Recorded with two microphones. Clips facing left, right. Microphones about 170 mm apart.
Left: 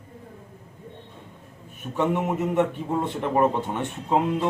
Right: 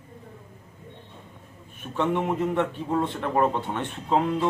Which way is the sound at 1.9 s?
10° left (ahead or behind).